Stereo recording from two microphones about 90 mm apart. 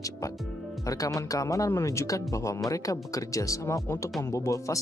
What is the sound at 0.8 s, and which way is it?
Speech, 40° left (ahead or behind).